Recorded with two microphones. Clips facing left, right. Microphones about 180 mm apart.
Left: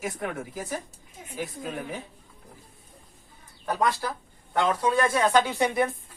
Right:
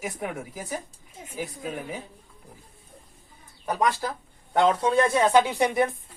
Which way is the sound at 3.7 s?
15° right (ahead or behind).